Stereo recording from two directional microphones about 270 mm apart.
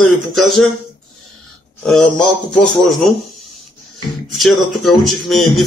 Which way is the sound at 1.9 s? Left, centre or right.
Centre.